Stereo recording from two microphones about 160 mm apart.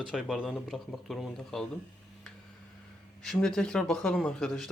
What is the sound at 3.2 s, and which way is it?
A man's voice, 5° left (ahead or behind).